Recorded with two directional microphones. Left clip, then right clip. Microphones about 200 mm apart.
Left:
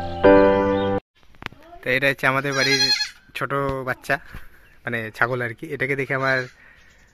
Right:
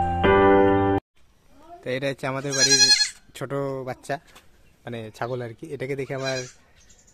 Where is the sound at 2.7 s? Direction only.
40° right (ahead or behind).